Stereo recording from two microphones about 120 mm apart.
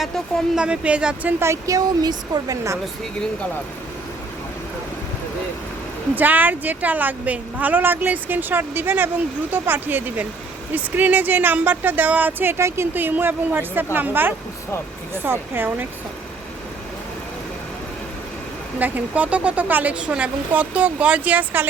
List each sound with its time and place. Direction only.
0.0 s speech: 5° right (ahead or behind); by 2.7 s 30° right (ahead or behind)
6.1 s speech: 15° right (ahead or behind)
18.8 s speech: 15° right (ahead or behind)